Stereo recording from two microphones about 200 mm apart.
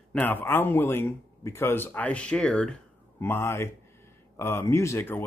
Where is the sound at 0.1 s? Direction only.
10° left (ahead or behind).